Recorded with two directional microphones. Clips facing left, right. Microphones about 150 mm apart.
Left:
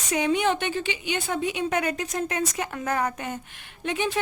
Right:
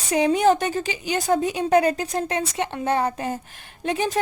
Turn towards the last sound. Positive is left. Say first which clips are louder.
# right 3 dB
turn(degrees=-35)  # may be behind; listen again after turning